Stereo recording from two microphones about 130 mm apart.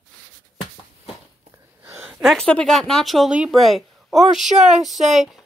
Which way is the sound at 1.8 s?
20° right (ahead or behind).